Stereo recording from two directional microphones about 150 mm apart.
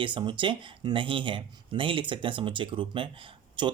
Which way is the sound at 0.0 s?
35° right (ahead or behind).